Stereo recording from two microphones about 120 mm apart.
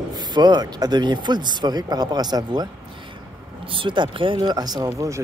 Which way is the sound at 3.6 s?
45° right (ahead or behind).